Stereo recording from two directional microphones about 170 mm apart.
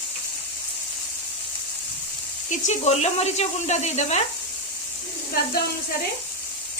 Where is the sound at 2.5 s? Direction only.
40° left (ahead or behind).